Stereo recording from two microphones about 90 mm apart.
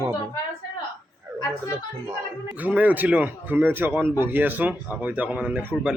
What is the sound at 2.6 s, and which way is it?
Speech, 15° right (ahead or behind).